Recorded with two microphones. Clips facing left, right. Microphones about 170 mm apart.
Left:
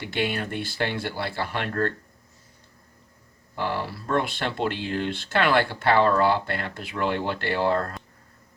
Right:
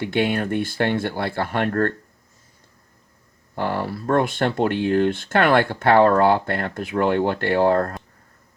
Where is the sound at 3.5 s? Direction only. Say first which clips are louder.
Right 4 dB; 50° right (ahead or behind).